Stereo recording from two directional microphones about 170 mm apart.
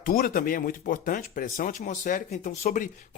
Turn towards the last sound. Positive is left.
turn(degrees=50)  # may be behind; listen again after turning